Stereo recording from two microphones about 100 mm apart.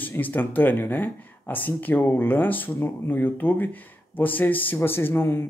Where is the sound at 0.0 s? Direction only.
20° left (ahead or behind).